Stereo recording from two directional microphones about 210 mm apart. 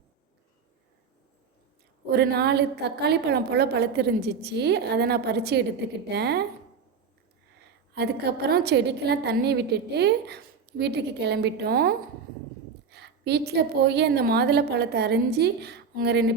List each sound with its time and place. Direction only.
2.0 s a woman's voice: 50° right (ahead or behind)
7.9 s a woman's voice: 50° right (ahead or behind)